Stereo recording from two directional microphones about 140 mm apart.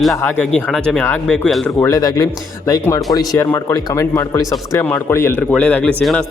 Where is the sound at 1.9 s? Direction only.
25° left (ahead or behind).